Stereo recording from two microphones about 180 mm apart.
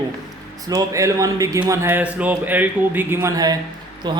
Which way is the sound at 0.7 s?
20° right (ahead or behind).